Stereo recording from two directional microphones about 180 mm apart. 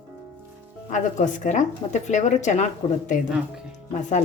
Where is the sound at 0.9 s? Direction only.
40° left (ahead or behind).